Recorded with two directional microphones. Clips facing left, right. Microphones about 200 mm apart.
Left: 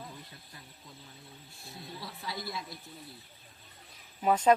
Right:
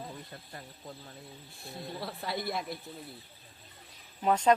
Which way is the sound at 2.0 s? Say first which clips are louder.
Right 5 dB; 55° right (ahead or behind).